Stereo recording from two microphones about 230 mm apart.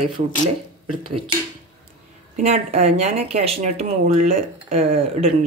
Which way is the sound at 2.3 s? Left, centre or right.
Right.